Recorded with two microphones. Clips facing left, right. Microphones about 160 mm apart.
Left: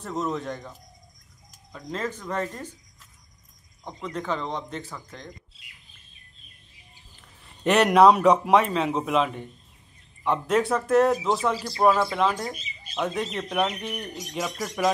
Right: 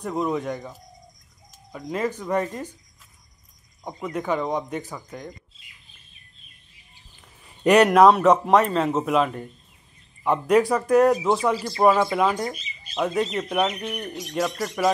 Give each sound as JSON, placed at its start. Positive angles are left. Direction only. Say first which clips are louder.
{"t": 0.0, "sound": "speech", "louder": "right 4 dB", "side_deg": -10}
{"t": 3.8, "sound": "speech", "louder": "right 4 dB", "side_deg": -10}
{"t": 5.5, "sound": "bird", "louder": "left 1 dB", "side_deg": 75}
{"t": 7.6, "sound": "speech", "louder": "right 2 dB", "side_deg": -5}